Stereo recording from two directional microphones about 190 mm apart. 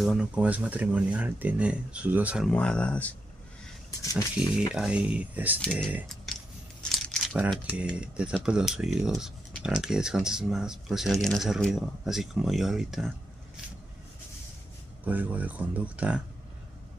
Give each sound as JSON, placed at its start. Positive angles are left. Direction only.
{"t": 0.0, "sound": "speech", "side_deg": -5}
{"t": 2.5, "sound": "speech", "side_deg": 5}
{"t": 4.0, "sound": "speech", "side_deg": 15}
{"t": 4.7, "sound": "speech", "side_deg": -5}
{"t": 6.9, "sound": "crumpling", "side_deg": 0}
{"t": 7.7, "sound": "speech", "side_deg": -5}
{"t": 15.0, "sound": "speech", "side_deg": -10}